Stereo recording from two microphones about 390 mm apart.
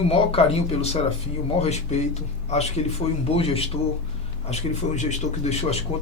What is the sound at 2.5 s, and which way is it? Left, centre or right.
Speech, centre.